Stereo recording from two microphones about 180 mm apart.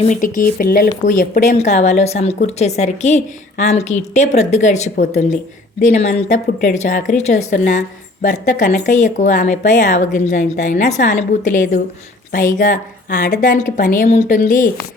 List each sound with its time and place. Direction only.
0.0 s a woman's voice: 45° left (ahead or behind)